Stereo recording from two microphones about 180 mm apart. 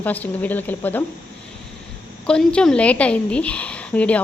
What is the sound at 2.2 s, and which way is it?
A woman's voice, 5° left (ahead or behind).